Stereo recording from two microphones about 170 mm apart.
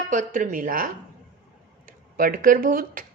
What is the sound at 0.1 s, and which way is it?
Speech, 50° right (ahead or behind).